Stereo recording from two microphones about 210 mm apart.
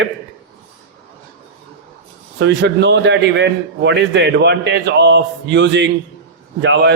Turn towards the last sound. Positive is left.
turn(degrees=-55)  # may be behind; listen again after turning